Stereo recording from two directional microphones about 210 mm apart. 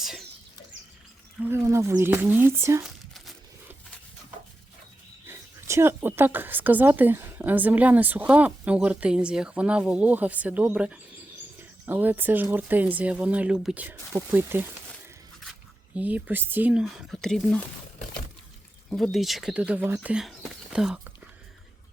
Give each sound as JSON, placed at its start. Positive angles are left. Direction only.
{"t": 0.0, "sound": "a sound", "side_deg": 0}
{"t": 1.5, "sound": "speech", "side_deg": -10}
{"t": 2.8, "sound": "crumpling", "side_deg": 0}
{"t": 5.3, "sound": "speech", "side_deg": -10}
{"t": 16.0, "sound": "speech", "side_deg": -5}
{"t": 18.9, "sound": "speech", "side_deg": 0}